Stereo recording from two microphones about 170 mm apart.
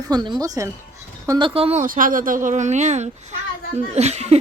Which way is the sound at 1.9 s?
55° right (ahead or behind).